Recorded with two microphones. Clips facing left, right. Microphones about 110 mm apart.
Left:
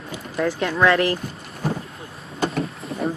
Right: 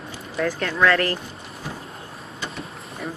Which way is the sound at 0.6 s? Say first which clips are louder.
Left 2 dB; 15° left (ahead or behind).